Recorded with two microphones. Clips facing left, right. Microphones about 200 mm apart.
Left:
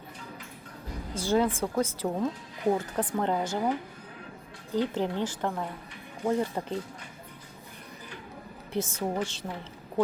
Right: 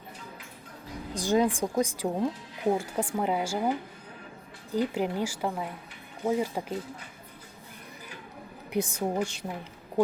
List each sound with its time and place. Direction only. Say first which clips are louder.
1.1 s speech: right 1 dB; 15° right (ahead or behind)
8.7 s speech: right 2 dB; 15° right (ahead or behind)